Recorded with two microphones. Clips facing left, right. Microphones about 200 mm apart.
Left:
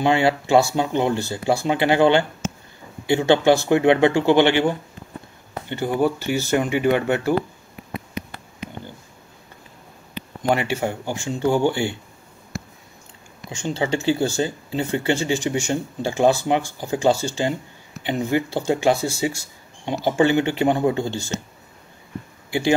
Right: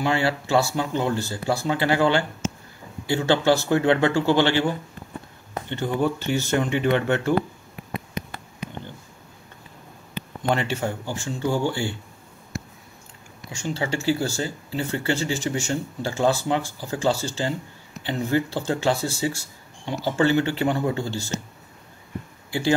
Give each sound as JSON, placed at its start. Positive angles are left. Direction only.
{"t": 0.0, "sound": "speech", "side_deg": 20}
{"t": 5.7, "sound": "speech", "side_deg": 10}
{"t": 10.5, "sound": "speech", "side_deg": 10}
{"t": 13.5, "sound": "speech", "side_deg": 20}